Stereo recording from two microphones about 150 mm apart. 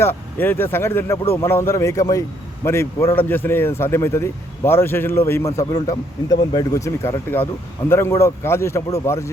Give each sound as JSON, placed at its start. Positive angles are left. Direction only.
{"t": 0.0, "sound": "speech", "side_deg": 15}